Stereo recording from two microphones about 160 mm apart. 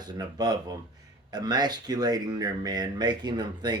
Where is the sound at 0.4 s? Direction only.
25° right (ahead or behind).